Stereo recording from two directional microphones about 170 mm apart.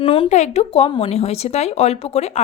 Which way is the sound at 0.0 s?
35° left (ahead or behind).